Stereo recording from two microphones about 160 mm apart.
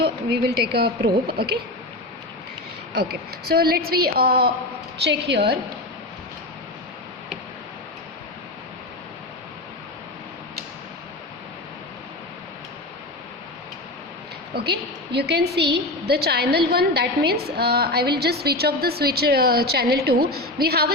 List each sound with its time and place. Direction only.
0.0 s a woman's voice: 90° right
3.4 s a woman's voice: 75° right (ahead or behind); by 5.5 s 90° right
14.5 s a woman's voice: 90° right